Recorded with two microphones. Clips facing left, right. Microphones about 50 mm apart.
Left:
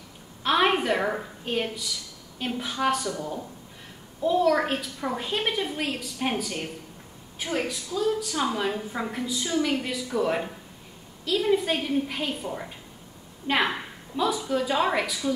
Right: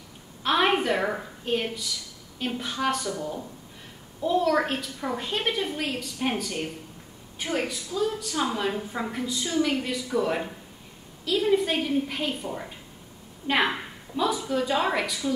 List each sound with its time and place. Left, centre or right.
0.4 s a woman's voice: centre
4.2 s a woman's voice: centre